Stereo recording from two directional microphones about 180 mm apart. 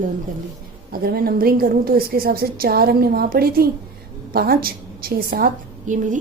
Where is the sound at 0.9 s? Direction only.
55° right (ahead or behind).